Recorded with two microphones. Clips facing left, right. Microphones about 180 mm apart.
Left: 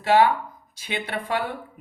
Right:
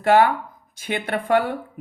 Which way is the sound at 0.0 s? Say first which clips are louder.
Right 2 dB; 50° right (ahead or behind).